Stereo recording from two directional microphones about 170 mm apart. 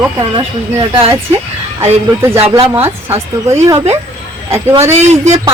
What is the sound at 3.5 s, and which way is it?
Speech, 15° right (ahead or behind).